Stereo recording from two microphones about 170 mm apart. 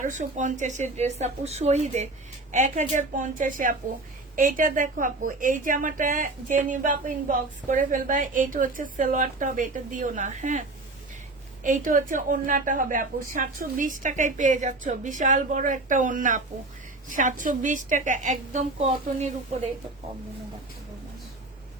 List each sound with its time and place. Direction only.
0.0 s a woman's voice: 45° right (ahead or behind)
11.6 s a woman's voice: 50° right (ahead or behind)